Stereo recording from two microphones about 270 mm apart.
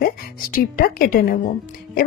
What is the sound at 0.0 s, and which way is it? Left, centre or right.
Speech, left.